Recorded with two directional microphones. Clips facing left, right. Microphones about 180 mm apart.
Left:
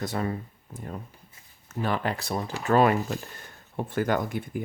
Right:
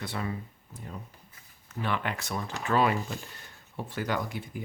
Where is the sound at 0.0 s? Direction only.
45° left (ahead or behind).